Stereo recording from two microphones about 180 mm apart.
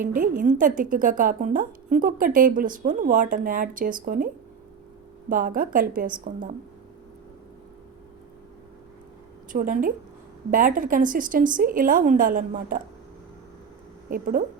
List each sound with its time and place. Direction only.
0.0 s speech: 50° right (ahead or behind)
5.3 s speech: 50° right (ahead or behind)
9.5 s speech: 50° right (ahead or behind)
14.1 s speech: 50° right (ahead or behind)